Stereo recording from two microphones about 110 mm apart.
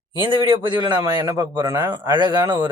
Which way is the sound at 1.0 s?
25° right (ahead or behind).